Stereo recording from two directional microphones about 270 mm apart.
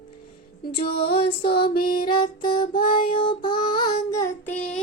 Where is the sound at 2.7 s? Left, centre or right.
Left.